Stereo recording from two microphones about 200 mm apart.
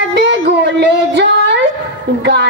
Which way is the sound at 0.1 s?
60° right (ahead or behind).